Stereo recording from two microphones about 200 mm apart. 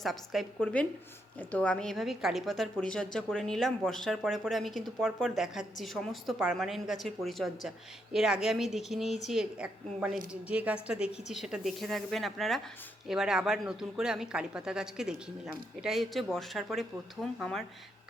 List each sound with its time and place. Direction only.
0.0 s speech: centre (ahead or behind)